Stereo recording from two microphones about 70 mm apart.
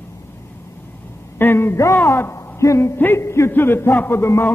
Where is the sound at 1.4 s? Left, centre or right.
Left.